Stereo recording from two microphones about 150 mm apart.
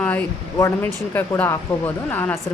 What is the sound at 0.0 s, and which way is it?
Speech, 10° left (ahead or behind).